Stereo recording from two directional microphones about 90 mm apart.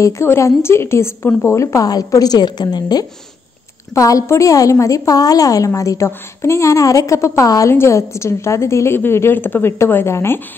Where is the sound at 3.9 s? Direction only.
35° left (ahead or behind).